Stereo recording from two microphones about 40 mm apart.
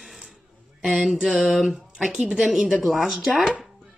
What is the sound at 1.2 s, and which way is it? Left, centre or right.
Speech, centre.